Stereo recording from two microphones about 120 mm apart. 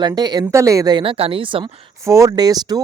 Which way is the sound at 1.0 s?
50° right (ahead or behind).